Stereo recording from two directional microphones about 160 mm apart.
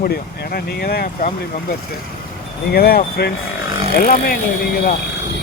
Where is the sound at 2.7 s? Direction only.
70° left (ahead or behind).